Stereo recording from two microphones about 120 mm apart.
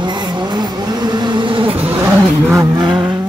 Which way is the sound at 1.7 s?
15° right (ahead or behind).